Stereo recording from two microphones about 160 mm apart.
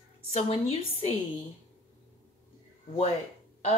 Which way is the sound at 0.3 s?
40° left (ahead or behind).